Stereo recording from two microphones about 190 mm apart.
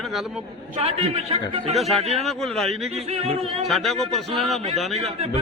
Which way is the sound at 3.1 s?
30° right (ahead or behind).